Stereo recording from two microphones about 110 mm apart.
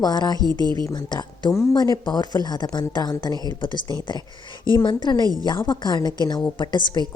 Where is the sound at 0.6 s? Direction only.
40° right (ahead or behind).